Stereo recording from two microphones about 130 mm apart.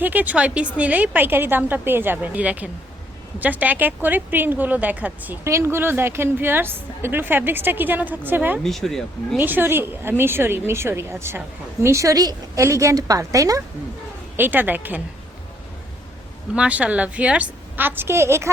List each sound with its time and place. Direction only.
0.0 s a woman's voice: 15° right (ahead or behind)
8.6 s speech: centre (ahead or behind)
9.4 s a woman's voice: 15° right (ahead or behind)
14.3 s a woman's voice: 15° right (ahead or behind)
16.6 s a woman's voice: 10° right (ahead or behind)